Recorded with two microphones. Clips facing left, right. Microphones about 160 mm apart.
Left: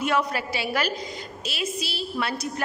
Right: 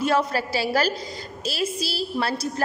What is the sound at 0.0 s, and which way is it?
A woman's voice, 35° right (ahead or behind).